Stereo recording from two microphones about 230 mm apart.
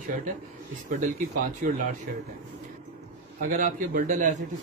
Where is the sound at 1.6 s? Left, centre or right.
Right.